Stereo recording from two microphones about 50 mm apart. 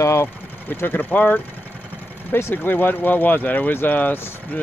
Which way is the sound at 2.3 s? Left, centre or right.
Left.